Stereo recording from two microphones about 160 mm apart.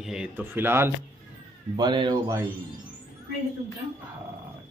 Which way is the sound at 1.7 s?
30° right (ahead or behind).